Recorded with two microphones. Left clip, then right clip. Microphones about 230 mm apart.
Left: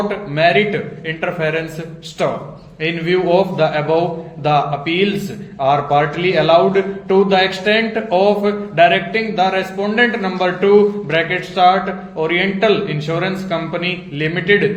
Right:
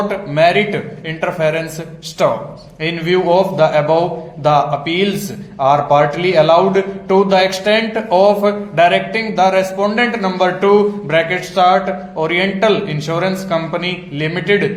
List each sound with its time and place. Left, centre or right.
0.1 s a man's voice: centre
2.8 s a man's voice: right